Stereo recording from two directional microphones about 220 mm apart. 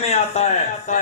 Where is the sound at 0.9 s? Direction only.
35° left (ahead or behind).